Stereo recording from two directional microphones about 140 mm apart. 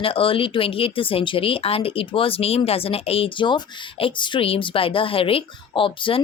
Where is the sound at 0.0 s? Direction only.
40° left (ahead or behind).